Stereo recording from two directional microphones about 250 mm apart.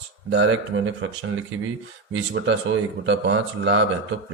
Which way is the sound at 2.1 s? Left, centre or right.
Right.